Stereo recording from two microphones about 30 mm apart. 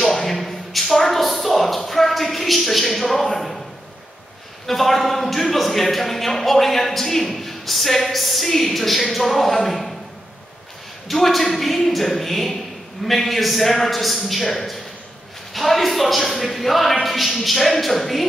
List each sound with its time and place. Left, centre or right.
0.2 s a sound: centre
4.6 s a man's voice: centre
11.1 s speech: centre